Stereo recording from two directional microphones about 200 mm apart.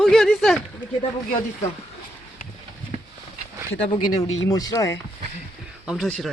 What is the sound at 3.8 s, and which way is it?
A woman's voice, 20° left (ahead or behind).